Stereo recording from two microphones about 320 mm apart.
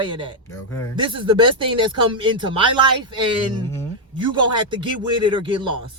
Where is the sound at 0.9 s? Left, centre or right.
Centre.